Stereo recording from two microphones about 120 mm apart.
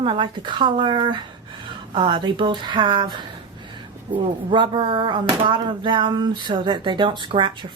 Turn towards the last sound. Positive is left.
turn(degrees=-45)  # may be behind; listen again after turning